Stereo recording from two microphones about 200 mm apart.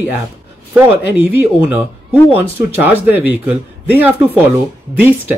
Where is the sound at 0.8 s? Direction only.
10° right (ahead or behind).